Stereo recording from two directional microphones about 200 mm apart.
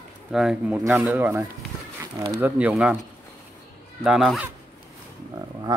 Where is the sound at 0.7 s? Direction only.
15° right (ahead or behind).